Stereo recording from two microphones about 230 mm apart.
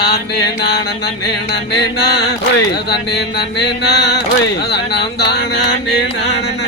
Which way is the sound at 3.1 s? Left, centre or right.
Left.